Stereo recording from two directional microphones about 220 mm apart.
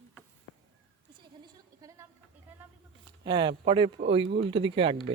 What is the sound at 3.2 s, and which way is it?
Speech, 20° right (ahead or behind).